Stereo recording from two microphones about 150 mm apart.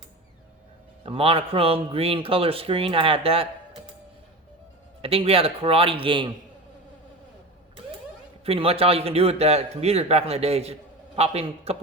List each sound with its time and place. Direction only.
1.0 s speech: 40° right (ahead or behind)
5.0 s speech: 40° right (ahead or behind)
8.4 s a man's voice: 40° right (ahead or behind)